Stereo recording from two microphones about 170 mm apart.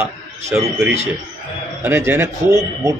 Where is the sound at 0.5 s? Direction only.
10° right (ahead or behind).